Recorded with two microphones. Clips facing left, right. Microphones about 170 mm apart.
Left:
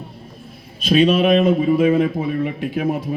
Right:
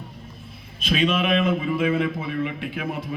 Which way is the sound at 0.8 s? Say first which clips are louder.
Left 8 dB; 35° left (ahead or behind).